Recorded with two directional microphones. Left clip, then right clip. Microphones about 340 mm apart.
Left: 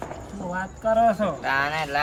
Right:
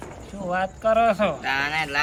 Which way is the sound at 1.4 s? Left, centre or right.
Centre.